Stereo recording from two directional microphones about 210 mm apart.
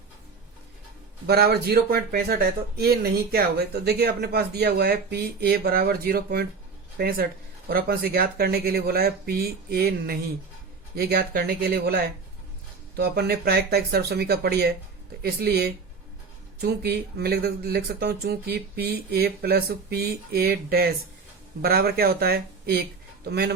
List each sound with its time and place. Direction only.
1.3 s speech: 50° right (ahead or behind)
13.0 s speech: 50° right (ahead or behind)